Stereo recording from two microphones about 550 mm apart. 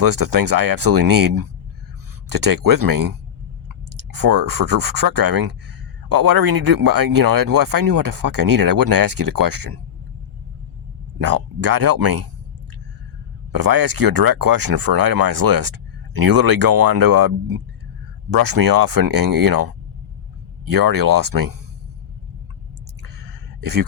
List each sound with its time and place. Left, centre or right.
0.0 s speech: right
4.1 s speech: right
11.2 s speech: right
13.5 s speech: right
23.6 s speech: right